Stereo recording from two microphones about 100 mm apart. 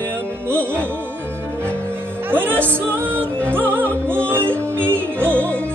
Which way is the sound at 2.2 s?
20° right (ahead or behind).